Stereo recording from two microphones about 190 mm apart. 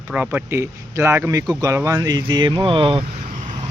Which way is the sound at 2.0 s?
25° right (ahead or behind).